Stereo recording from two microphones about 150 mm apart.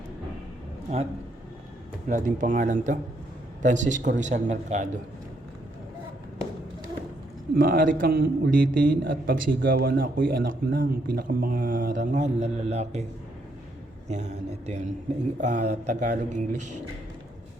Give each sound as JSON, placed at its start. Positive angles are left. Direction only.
{"t": 2.0, "sound": "speech", "side_deg": -60}
{"t": 7.5, "sound": "a man's voice", "side_deg": -70}
{"t": 14.1, "sound": "speech", "side_deg": -50}